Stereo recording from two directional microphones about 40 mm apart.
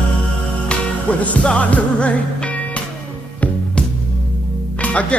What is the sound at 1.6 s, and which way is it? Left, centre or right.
Music, left.